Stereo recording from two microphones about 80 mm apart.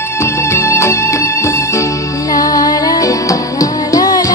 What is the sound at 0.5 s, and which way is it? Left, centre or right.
Music, left.